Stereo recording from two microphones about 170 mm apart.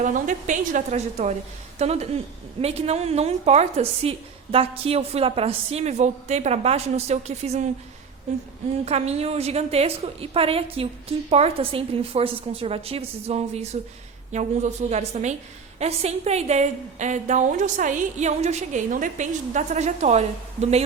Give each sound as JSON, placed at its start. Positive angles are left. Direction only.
{"t": 0.0, "sound": "a woman's voice", "side_deg": -50}
{"t": 8.8, "sound": "a woman's voice", "side_deg": -40}